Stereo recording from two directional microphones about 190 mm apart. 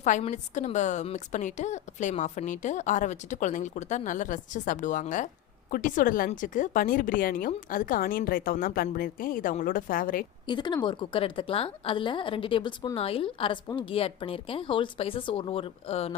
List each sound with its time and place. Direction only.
0.0 s a woman's voice: 40° left (ahead or behind)
10.4 s a woman's voice: 25° left (ahead or behind)